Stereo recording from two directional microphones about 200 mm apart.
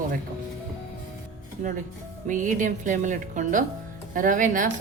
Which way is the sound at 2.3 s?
40° right (ahead or behind).